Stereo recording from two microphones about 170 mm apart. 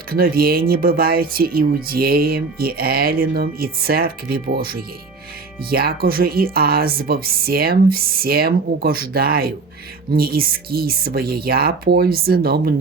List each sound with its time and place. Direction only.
0.1 s speech: 60° right (ahead or behind)